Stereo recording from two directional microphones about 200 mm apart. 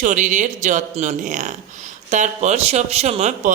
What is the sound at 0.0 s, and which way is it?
Speech, 40° right (ahead or behind).